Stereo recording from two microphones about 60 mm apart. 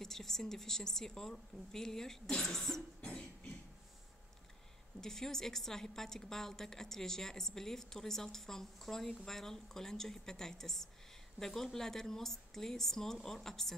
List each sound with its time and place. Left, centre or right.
0.0 s a woman's voice: centre
3.0 s beatboxing: centre
5.0 s a woman's voice: centre